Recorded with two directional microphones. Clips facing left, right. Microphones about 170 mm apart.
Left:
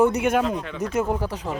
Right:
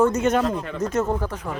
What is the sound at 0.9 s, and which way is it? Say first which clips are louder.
Speech: left 1 dB; 10° left (ahead or behind).